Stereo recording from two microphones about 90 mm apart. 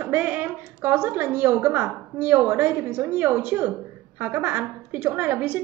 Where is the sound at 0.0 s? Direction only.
20° right (ahead or behind).